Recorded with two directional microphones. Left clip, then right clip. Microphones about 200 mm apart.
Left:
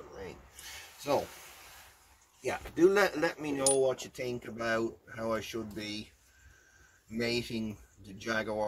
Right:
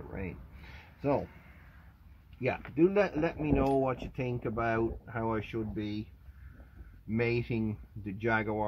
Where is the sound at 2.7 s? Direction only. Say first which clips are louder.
Left 2 dB; 5° left (ahead or behind).